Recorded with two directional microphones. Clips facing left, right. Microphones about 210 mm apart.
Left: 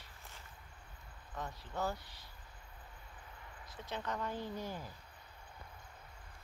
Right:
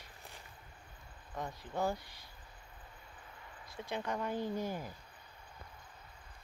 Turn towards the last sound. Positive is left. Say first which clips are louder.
# right 5 dB
turn(degrees=-15)  # may be behind; listen again after turning